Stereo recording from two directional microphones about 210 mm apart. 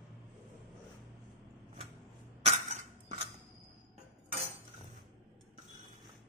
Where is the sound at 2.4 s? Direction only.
35° right (ahead or behind).